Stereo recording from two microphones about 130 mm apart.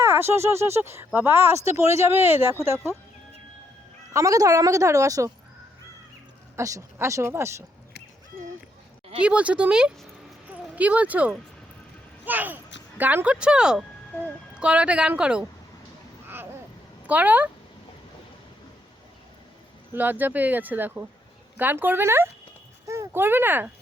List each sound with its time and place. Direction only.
0.0 s speech: 20° right (ahead or behind)
4.1 s speech: 25° right (ahead or behind)
6.6 s speech: 25° right (ahead or behind)
9.2 s a child's voice: 10° right (ahead or behind)
16.2 s boat: 15° right (ahead or behind)
17.1 s a child's voice: 10° right (ahead or behind)
19.9 s a child's voice: 15° right (ahead or behind)